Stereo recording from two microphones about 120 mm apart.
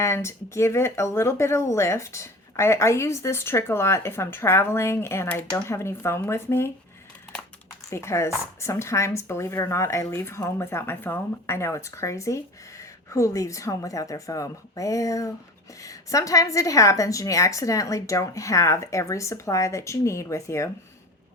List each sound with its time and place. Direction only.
0.0 s speech: 20° left (ahead or behind)
7.9 s speech: 25° left (ahead or behind)